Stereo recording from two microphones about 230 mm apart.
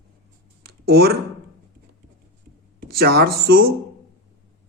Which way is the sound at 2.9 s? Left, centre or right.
Right.